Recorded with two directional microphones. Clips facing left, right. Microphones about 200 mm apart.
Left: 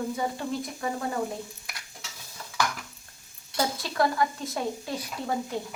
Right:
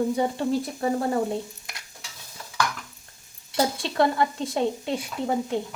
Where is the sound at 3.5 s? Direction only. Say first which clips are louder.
Right 4 dB; 25° right (ahead or behind).